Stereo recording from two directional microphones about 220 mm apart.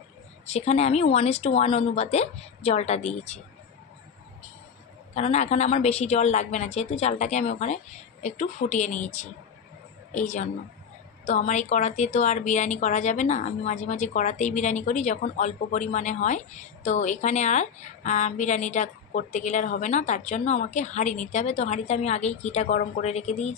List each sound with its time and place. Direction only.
0.5 s speech: 30° left (ahead or behind)
5.1 s a woman's voice: 30° left (ahead or behind)